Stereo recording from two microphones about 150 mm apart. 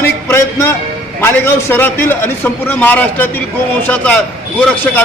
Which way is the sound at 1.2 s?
15° left (ahead or behind).